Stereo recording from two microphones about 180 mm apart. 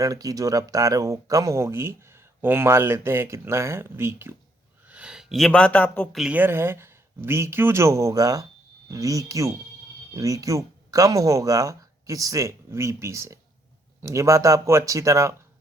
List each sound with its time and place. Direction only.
0.0 s speech: 20° right (ahead or behind); by 6.2 s 10° left (ahead or behind)
6.2 s speech: 10° right (ahead or behind)